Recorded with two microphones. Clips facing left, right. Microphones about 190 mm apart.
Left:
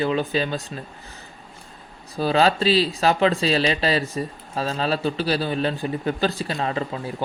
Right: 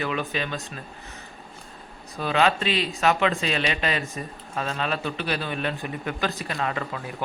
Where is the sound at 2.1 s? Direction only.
35° left (ahead or behind).